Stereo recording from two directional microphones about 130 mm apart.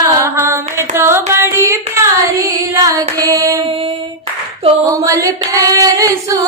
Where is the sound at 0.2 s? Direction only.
20° right (ahead or behind).